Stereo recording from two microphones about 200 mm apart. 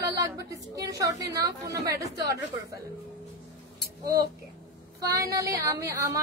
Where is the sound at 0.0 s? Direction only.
15° right (ahead or behind).